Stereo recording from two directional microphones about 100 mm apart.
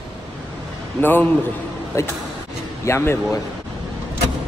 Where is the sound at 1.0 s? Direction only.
20° left (ahead or behind).